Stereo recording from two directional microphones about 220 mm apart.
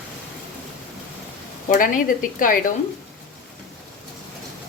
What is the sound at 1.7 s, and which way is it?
Speech, 40° left (ahead or behind).